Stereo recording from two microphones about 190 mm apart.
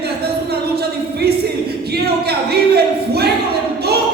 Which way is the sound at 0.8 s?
60° right (ahead or behind).